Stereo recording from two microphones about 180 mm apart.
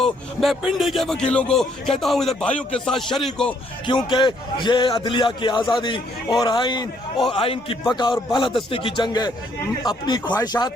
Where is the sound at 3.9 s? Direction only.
25° left (ahead or behind).